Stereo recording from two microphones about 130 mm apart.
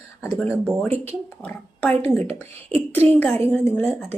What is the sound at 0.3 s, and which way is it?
Speech, 15° left (ahead or behind).